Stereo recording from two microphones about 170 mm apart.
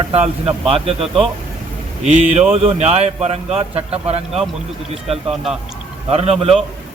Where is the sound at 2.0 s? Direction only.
40° right (ahead or behind).